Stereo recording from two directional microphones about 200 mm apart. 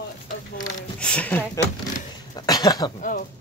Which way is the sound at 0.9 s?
5° left (ahead or behind).